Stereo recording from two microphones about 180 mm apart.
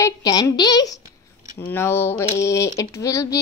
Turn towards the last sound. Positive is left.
turn(degrees=15)  # may be behind; listen again after turning